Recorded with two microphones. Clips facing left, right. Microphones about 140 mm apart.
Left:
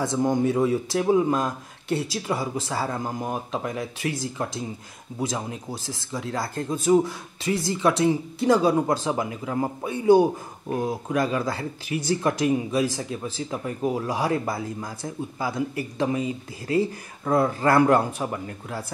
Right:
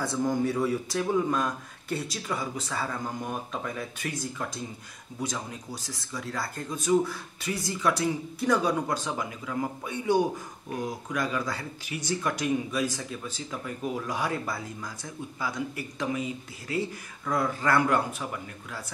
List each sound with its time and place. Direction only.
0.0 s speech: 25° left (ahead or behind)
5.3 s speech: 25° left (ahead or behind)